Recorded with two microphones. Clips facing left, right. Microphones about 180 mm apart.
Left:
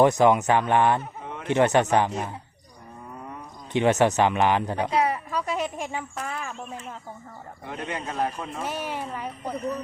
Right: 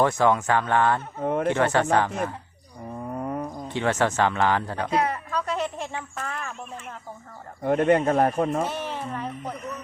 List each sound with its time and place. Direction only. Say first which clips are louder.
0.0 s speech: left 3 dB; 20° left (ahead or behind)
1.2 s a sound: right 13 dB; 50° right (ahead or behind)
1.5 s speech: left 4 dB; 20° left (ahead or behind)
3.1 s wild animals: right 10 dB; 55° right (ahead or behind)
3.7 s a woman's voice: left 4 dB; 20° left (ahead or behind)
7.6 s speech: right 14 dB; 50° right (ahead or behind)
8.7 s a woman's voice: even; 10° left (ahead or behind)
9.6 s speech: left 6 dB; 35° left (ahead or behind)